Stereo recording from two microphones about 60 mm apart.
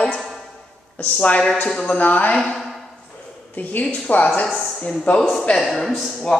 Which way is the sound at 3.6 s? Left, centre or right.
Left.